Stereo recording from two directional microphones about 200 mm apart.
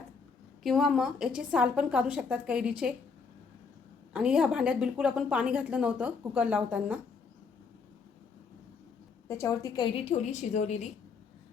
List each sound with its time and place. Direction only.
0.6 s a woman's voice: centre (ahead or behind)
4.1 s a woman's voice: 5° right (ahead or behind)
9.2 s a woman's voice: 15° left (ahead or behind); by 10.8 s 35° left (ahead or behind)